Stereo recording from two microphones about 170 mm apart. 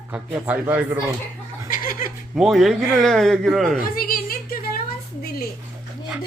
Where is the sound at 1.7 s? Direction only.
55° left (ahead or behind).